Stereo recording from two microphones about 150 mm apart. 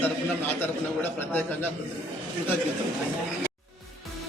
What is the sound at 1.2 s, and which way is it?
Speech, 10° left (ahead or behind).